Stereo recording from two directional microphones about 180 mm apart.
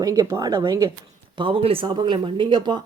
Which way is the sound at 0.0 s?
20° right (ahead or behind).